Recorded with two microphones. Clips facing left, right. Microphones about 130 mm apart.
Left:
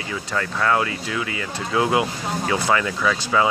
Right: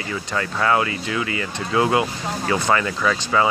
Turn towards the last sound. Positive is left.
turn(degrees=0)  # may be behind; listen again after turning